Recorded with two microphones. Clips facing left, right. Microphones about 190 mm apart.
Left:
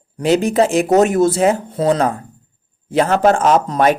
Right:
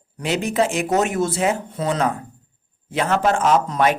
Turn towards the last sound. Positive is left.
turn(degrees=40)  # may be behind; listen again after turning